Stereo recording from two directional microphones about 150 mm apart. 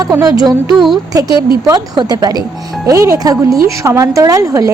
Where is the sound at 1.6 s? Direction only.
25° right (ahead or behind).